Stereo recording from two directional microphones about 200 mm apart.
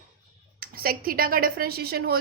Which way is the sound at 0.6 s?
50° right (ahead or behind).